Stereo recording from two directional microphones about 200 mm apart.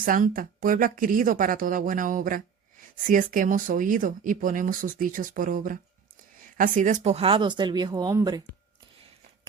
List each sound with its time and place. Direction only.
0.0 s speech: 45° right (ahead or behind); by 8.4 s 20° right (ahead or behind)